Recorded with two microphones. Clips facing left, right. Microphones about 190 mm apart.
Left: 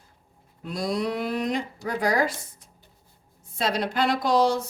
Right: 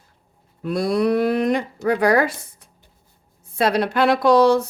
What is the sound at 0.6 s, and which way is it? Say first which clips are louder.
Speech: right 8 dB; 60° right (ahead or behind).